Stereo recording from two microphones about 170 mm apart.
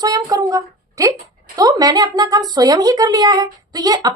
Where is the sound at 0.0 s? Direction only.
20° right (ahead or behind).